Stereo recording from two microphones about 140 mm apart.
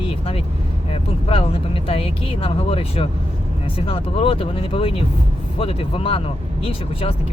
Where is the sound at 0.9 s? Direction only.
45° left (ahead or behind).